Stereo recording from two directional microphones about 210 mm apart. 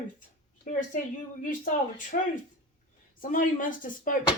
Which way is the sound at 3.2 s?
40° left (ahead or behind).